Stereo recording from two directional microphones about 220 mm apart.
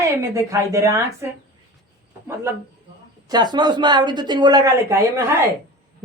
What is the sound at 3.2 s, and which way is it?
A woman's voice, 20° right (ahead or behind).